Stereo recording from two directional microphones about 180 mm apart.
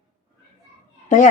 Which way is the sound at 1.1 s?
40° left (ahead or behind).